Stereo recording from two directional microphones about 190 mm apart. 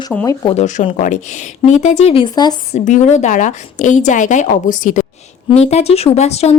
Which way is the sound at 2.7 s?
40° left (ahead or behind).